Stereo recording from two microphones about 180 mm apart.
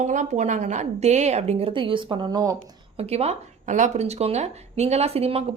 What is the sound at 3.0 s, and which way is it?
Speech, 35° right (ahead or behind).